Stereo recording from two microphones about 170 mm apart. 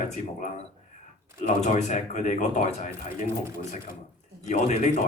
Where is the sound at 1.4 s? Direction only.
40° left (ahead or behind).